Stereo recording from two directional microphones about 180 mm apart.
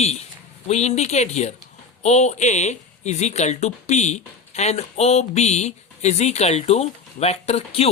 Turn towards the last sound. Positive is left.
turn(degrees=35)  # may be behind; listen again after turning